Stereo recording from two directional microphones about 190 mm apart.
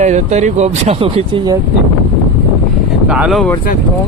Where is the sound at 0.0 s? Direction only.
35° right (ahead or behind).